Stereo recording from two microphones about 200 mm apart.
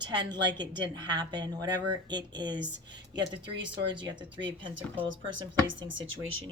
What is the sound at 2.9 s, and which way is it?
Speech, 60° right (ahead or behind).